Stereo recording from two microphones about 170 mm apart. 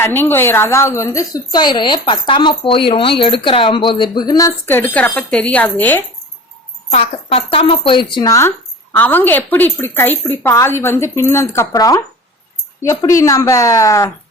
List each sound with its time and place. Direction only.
0.0 s a woman's voice: 10° left (ahead or behind)
6.9 s a woman's voice: 35° left (ahead or behind); by 14.1 s 20° left (ahead or behind)